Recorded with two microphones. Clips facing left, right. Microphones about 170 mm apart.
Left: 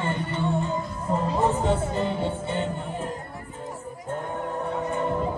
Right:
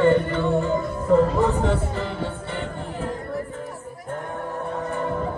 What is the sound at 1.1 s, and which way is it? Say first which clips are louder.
Music: right 6 dB; 20° left (ahead or behind).